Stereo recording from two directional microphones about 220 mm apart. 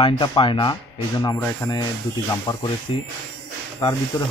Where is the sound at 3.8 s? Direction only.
20° left (ahead or behind).